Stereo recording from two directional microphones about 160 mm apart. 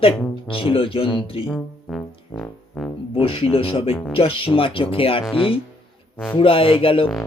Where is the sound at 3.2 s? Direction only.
35° left (ahead or behind).